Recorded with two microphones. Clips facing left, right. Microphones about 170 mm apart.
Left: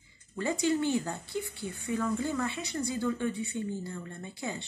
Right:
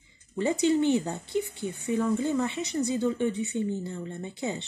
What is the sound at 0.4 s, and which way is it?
Speech, 20° right (ahead or behind).